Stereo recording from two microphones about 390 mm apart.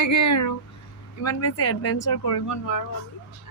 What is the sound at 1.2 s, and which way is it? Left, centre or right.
Speech, left.